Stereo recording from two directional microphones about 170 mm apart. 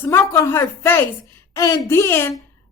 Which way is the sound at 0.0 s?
15° left (ahead or behind).